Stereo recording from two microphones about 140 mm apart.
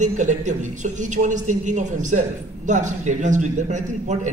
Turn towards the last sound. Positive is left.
turn(degrees=-60)  # may be behind; listen again after turning